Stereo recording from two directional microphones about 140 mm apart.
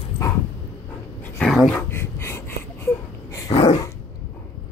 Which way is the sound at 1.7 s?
15° left (ahead or behind).